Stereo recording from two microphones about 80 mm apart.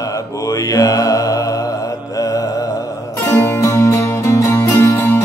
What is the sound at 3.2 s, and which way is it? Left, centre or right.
Music, left.